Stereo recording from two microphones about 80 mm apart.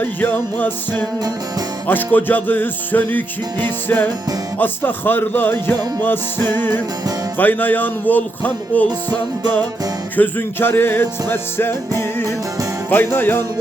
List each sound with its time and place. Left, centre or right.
0.0 s music: left
10.2 s music: left
12.9 s music: left